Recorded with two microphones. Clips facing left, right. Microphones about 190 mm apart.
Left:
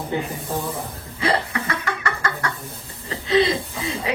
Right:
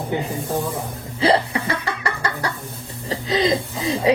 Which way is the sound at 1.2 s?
30° right (ahead or behind).